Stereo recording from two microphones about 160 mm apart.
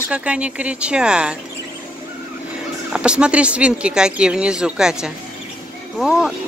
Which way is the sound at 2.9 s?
5° right (ahead or behind).